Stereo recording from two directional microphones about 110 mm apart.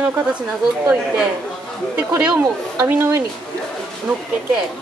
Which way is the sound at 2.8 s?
25° right (ahead or behind).